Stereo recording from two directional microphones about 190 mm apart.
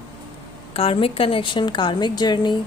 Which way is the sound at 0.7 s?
30° left (ahead or behind).